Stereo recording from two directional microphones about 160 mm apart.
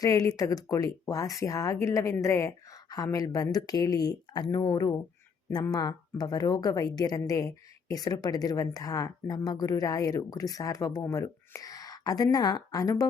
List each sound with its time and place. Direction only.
0.0 s a woman's voice: 20° left (ahead or behind)